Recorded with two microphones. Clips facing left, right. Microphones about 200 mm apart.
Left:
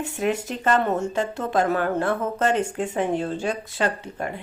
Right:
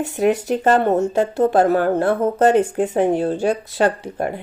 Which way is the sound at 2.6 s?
50° right (ahead or behind).